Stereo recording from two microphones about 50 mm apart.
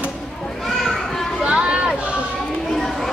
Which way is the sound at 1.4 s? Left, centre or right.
Right.